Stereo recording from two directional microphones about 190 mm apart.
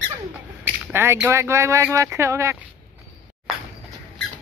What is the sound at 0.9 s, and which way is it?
Speech, 15° right (ahead or behind).